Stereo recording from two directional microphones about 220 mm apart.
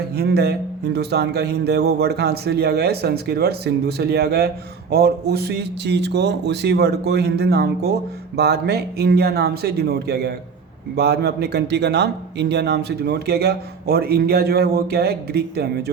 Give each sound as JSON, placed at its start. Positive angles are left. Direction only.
{"t": 0.2, "sound": "a man's voice", "side_deg": -45}